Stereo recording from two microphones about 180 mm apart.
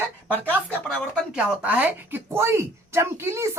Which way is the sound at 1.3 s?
5° right (ahead or behind).